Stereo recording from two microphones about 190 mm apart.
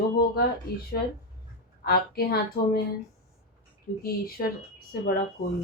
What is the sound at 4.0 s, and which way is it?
A woman's voice, 50° left (ahead or behind).